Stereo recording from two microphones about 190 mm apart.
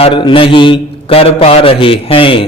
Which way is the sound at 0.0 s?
25° left (ahead or behind).